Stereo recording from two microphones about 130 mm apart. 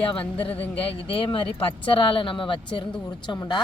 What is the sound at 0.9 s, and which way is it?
Speech, 45° left (ahead or behind).